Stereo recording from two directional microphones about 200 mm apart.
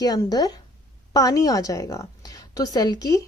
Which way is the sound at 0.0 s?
20° left (ahead or behind).